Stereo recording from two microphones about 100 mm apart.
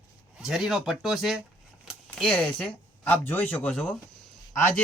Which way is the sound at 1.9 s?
Centre (ahead or behind).